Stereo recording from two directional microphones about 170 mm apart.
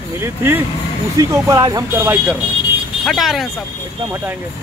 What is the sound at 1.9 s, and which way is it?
Speech, 10° right (ahead or behind).